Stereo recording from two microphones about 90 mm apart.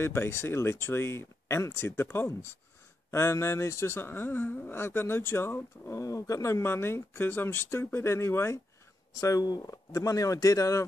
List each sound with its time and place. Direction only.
0.0 s speech: 30° left (ahead or behind)
6.0 s speech: 40° left (ahead or behind)
9.1 s speech: 40° left (ahead or behind)